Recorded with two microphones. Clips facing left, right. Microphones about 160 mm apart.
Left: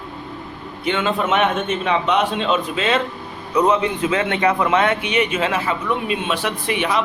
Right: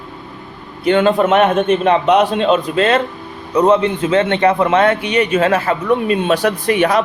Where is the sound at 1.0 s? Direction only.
40° right (ahead or behind).